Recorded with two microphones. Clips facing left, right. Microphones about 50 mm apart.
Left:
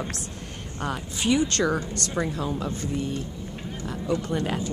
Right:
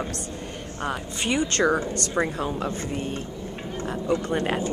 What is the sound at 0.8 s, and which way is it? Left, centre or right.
Speech, centre.